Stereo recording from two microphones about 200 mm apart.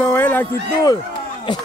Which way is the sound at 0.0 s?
10° left (ahead or behind).